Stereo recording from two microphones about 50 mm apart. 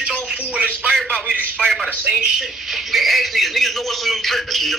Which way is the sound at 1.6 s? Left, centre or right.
Centre.